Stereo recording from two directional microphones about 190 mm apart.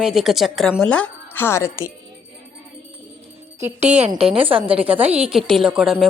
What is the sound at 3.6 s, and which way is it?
A woman's voice, 35° right (ahead or behind).